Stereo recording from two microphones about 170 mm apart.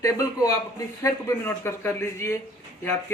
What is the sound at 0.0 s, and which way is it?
A man's voice, 20° left (ahead or behind).